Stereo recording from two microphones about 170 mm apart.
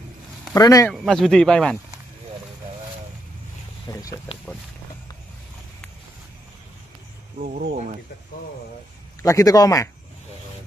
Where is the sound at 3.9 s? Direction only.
20° left (ahead or behind).